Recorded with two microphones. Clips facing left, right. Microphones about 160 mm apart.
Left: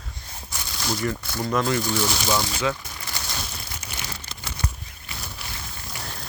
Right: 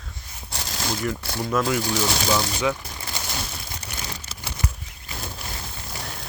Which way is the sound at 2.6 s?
15° right (ahead or behind).